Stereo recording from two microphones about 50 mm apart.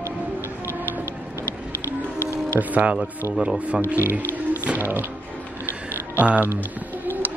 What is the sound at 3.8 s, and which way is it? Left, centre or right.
Speech, right.